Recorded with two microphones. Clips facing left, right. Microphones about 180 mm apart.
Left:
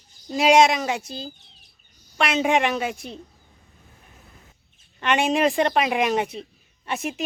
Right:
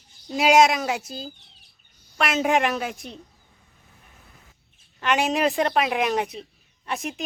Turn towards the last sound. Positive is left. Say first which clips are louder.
# left 2 dB
turn(degrees=0)  # may be behind; listen again after turning